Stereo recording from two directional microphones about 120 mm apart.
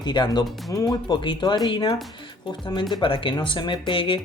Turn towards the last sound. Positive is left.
turn(degrees=45)  # may be behind; listen again after turning